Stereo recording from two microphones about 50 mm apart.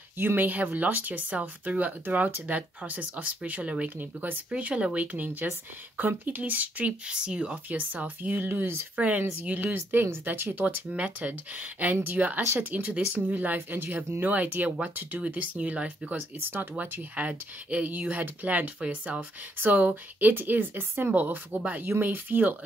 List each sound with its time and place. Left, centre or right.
0.2 s speech: right
7.1 s speech: centre
7.7 s speech: right
8.9 s speech: right
9.2 s speech: right
10.5 s speech: right
12.4 s speech: right
12.7 s speech: right
14.2 s speech: right
16.3 s speech: right
17.1 s speech: right
19.6 s speech: right